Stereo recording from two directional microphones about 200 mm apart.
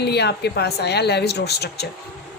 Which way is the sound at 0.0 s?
55° left (ahead or behind).